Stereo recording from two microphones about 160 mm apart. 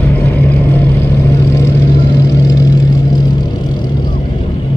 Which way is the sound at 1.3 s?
20° left (ahead or behind).